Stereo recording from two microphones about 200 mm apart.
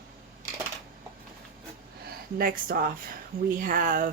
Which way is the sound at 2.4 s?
45° right (ahead or behind).